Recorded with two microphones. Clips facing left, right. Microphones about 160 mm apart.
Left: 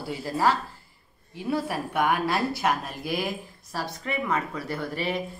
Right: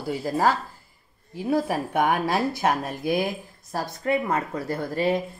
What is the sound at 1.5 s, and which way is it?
Speech, 45° right (ahead or behind).